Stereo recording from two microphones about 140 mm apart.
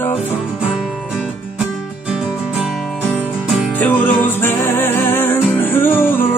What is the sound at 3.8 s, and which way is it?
Music, 15° left (ahead or behind).